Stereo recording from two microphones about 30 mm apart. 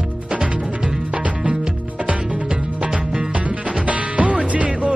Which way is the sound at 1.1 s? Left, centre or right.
Right.